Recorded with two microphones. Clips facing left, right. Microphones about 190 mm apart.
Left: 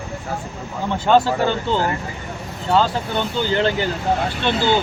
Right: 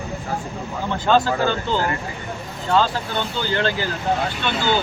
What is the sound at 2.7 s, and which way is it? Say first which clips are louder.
Speech: left 1 dB; 20° left (ahead or behind).